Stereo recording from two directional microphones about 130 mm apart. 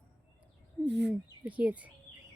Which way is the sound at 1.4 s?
10° right (ahead or behind).